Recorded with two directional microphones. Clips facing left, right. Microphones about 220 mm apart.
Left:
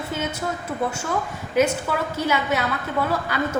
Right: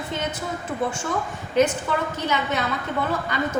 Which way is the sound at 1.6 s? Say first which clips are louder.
Even; 10° left (ahead or behind).